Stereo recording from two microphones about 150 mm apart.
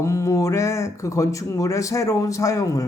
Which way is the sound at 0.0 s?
20° left (ahead or behind).